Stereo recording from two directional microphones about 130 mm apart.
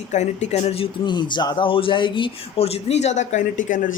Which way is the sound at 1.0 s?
35° left (ahead or behind).